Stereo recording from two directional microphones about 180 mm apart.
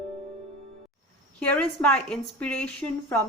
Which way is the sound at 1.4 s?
5° left (ahead or behind).